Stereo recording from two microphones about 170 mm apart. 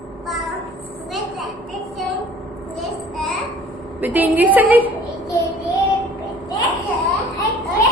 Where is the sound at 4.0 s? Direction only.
10° right (ahead or behind).